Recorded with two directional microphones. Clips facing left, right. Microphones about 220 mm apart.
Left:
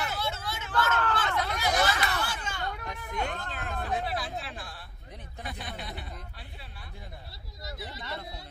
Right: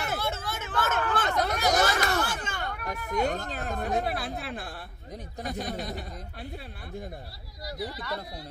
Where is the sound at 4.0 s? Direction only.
60° right (ahead or behind).